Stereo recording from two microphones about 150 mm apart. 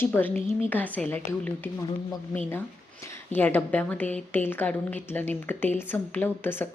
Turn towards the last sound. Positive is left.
turn(degrees=15)  # may be behind; listen again after turning